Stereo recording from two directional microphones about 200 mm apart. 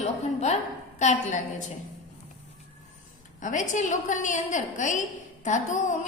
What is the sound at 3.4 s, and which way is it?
A woman's voice, 40° left (ahead or behind).